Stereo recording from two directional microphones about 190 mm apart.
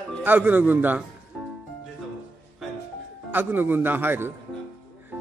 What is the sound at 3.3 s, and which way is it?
Speech, 10° right (ahead or behind).